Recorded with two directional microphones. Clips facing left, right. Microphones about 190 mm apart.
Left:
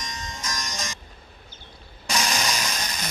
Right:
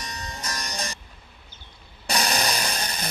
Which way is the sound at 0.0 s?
35° right (ahead or behind).